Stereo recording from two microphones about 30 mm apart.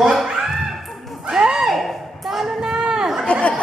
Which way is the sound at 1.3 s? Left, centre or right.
Right.